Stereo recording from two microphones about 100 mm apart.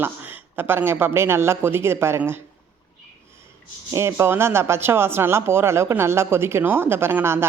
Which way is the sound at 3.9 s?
30° right (ahead or behind).